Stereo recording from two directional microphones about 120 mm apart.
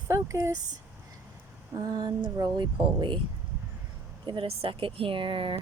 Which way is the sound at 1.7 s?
30° right (ahead or behind).